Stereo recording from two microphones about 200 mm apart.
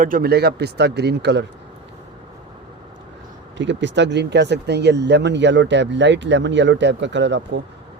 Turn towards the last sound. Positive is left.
turn(degrees=-60)  # may be behind; listen again after turning